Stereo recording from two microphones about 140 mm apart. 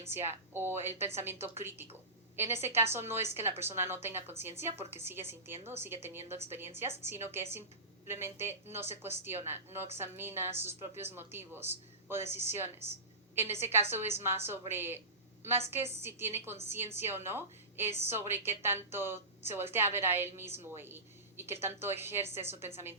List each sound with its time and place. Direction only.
0.0 s a woman's voice: 15° right (ahead or behind)